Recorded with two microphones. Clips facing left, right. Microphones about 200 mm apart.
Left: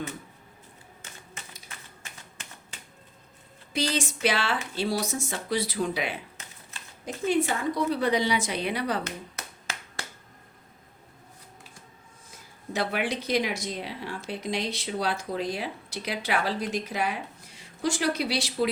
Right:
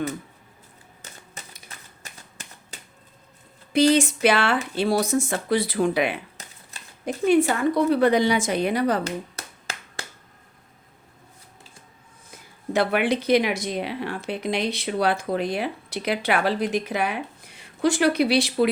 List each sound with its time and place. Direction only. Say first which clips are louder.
1.0 s typewriter: right 3 dB; 40° right (ahead or behind)
2.7 s typewriter: right 6 dB; 40° right (ahead or behind)
3.7 s speech: right 11 dB; 55° right (ahead or behind)
6.4 s typewriter: right 3 dB; 35° right (ahead or behind)
7.0 s a woman's voice: right 7 dB; 60° right (ahead or behind); by 9.0 s 45° right (ahead or behind)
9.0 s a sound: right 7 dB; 30° right (ahead or behind)
12.7 s a woman's voice: right 7 dB; 60° right (ahead or behind)